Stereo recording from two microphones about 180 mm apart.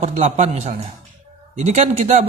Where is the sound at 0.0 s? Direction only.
40° right (ahead or behind).